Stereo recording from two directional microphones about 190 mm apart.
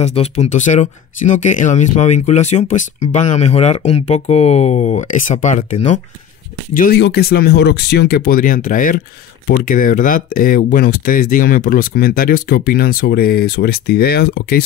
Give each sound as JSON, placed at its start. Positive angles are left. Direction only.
{"t": 0.0, "sound": "speech", "side_deg": 35}
{"t": 7.0, "sound": "speech", "side_deg": 55}